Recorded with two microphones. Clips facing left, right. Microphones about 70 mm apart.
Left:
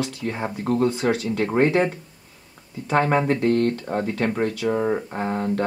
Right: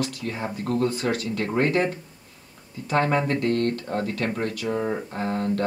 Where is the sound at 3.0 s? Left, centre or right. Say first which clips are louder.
Left 3 dB; centre.